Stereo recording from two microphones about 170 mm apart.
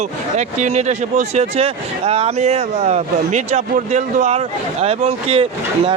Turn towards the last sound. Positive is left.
turn(degrees=-35)  # may be behind; listen again after turning